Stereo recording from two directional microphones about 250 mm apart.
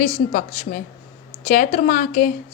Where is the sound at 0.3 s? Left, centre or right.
Left.